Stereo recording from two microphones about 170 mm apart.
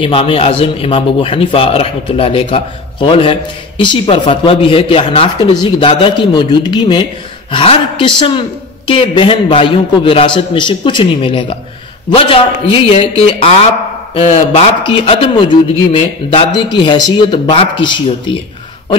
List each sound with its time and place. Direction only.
0.0 s a man's voice: 30° left (ahead or behind)